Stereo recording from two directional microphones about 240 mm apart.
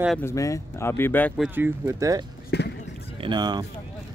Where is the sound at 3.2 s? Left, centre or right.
Centre.